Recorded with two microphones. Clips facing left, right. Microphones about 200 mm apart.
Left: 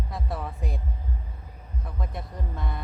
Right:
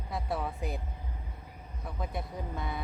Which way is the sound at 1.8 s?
Centre (ahead or behind).